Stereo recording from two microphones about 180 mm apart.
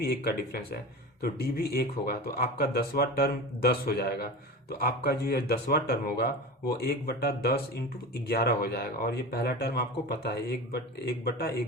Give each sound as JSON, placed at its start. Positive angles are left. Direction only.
{"t": 0.0, "sound": "speech", "side_deg": 60}